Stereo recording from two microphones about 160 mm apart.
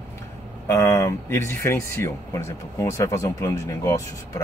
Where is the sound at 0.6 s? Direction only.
15° left (ahead or behind).